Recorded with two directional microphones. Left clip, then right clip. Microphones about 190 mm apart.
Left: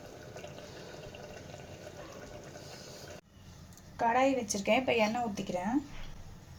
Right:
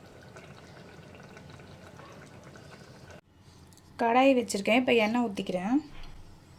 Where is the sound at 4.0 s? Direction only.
50° right (ahead or behind).